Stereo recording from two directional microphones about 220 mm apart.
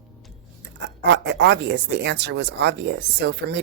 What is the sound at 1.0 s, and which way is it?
Speech, 55° right (ahead or behind).